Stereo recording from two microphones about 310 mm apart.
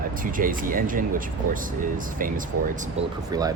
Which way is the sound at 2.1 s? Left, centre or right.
Right.